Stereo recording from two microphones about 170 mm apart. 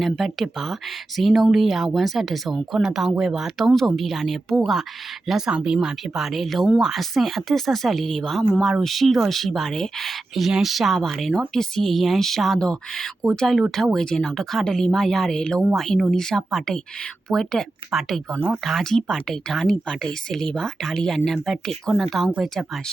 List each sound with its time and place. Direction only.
0.0 s speech: centre (ahead or behind)